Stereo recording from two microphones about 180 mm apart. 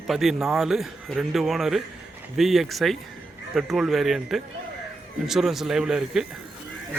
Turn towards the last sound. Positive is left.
turn(degrees=-5)  # may be behind; listen again after turning